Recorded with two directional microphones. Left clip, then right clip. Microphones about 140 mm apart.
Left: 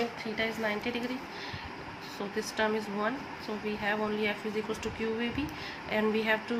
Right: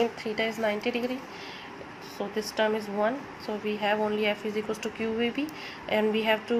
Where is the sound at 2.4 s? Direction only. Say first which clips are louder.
Right 3 dB; 30° right (ahead or behind).